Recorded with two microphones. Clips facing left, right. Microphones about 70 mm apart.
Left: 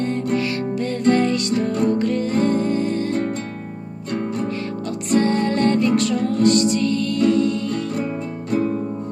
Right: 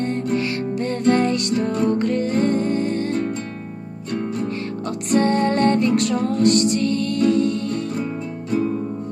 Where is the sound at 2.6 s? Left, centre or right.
Right.